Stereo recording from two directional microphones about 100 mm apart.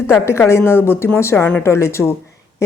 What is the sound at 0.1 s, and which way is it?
A woman's voice, 25° left (ahead or behind).